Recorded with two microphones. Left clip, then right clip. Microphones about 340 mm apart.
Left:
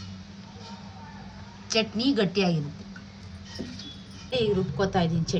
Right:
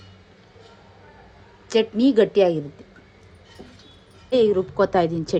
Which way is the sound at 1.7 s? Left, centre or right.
Centre.